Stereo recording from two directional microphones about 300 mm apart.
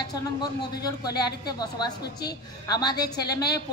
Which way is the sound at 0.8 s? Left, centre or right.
Centre.